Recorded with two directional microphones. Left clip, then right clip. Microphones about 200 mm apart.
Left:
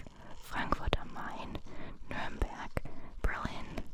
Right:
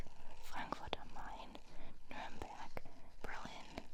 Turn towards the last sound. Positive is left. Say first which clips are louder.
# left 9 dB
turn(degrees=55)  # may be behind; listen again after turning